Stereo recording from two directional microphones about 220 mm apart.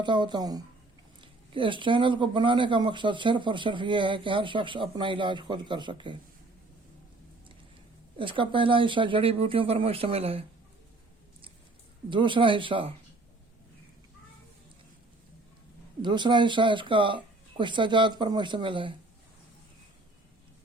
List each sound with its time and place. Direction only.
0.0 s speech: 20° right (ahead or behind)
8.2 s speech: 25° right (ahead or behind)
12.1 s speech: 20° right (ahead or behind)
16.0 s speech: 20° right (ahead or behind)